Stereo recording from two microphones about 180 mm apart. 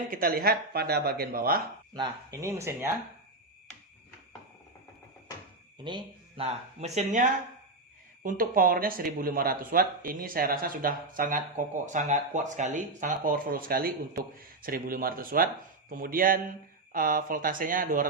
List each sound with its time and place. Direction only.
0.1 s speech: 50° right (ahead or behind)
1.9 s speech: 20° right (ahead or behind)
5.8 s speech: 30° right (ahead or behind); by 18.1 s 50° right (ahead or behind)